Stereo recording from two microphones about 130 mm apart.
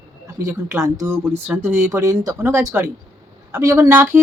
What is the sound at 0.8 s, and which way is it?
Speech, 25° right (ahead or behind).